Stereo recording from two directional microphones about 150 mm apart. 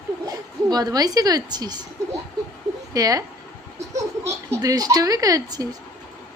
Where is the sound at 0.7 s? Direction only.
25° right (ahead or behind).